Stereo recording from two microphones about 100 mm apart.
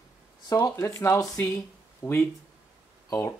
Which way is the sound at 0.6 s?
25° left (ahead or behind).